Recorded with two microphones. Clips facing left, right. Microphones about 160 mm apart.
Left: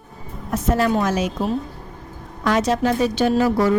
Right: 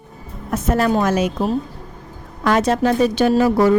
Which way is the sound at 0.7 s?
50° right (ahead or behind).